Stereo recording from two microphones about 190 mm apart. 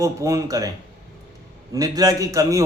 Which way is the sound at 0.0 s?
15° right (ahead or behind).